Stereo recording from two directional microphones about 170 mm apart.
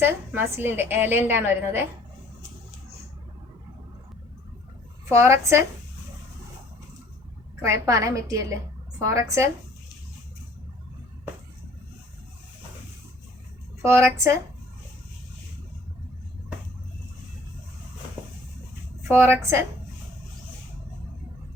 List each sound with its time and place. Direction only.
0.0 s a woman's voice: 10° right (ahead or behind)
5.1 s a woman's voice: 15° right (ahead or behind)
7.6 s a woman's voice: 20° right (ahead or behind)
13.8 s a woman's voice: 15° right (ahead or behind)
19.1 s a woman's voice: 15° right (ahead or behind)